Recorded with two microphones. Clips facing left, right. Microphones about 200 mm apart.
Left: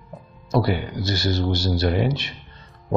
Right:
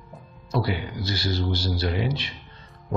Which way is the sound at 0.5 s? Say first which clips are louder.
Left 5 dB; 45° left (ahead or behind).